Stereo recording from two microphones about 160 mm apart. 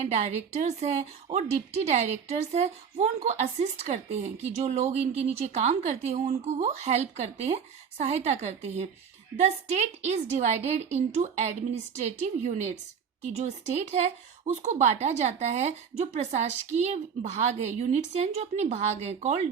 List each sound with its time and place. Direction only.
0.0 s speech: 45° right (ahead or behind)